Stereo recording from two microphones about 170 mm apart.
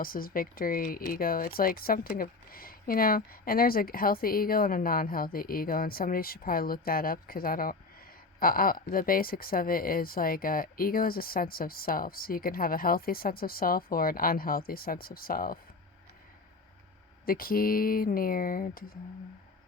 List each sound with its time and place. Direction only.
0.0 s speech: 55° left (ahead or behind)
17.2 s speech: 60° left (ahead or behind)